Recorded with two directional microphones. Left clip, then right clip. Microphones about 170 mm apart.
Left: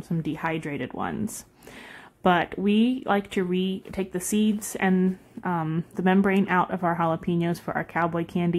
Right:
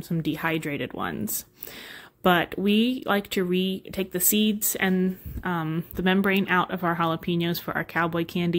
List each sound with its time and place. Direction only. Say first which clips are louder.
0.2 s speech: right 2 dB; 20° right (ahead or behind)
2.2 s speech: even; 20° right (ahead or behind)
5.7 s speech: even; centre (ahead or behind)
6.3 s speech: even; 15° right (ahead or behind)